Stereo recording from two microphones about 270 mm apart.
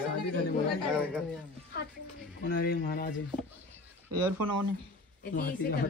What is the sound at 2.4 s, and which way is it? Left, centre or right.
Speech, left.